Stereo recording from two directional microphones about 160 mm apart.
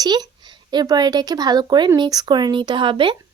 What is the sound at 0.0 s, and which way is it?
Speech, 25° right (ahead or behind).